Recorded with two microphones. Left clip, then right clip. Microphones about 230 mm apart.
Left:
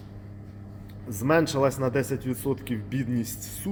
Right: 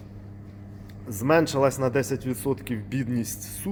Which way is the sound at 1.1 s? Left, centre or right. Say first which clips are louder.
Right 2 dB; centre.